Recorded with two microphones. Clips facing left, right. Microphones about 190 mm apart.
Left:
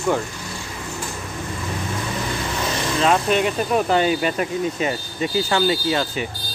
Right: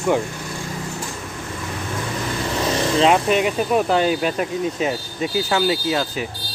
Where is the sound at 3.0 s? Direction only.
20° right (ahead or behind).